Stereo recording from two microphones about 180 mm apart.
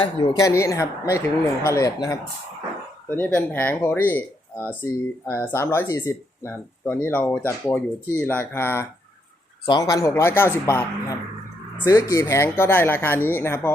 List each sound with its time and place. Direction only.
0.0 s speech: 30° left (ahead or behind)
0.4 s speech: 15° left (ahead or behind)